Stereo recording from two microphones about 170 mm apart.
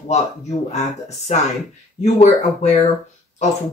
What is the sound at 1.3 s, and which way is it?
Speech, 45° left (ahead or behind).